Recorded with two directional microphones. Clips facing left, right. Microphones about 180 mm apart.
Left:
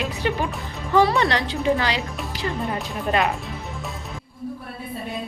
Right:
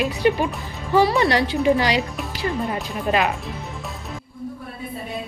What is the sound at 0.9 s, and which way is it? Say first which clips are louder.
A woman's voice: right 1 dB; 5° right (ahead or behind).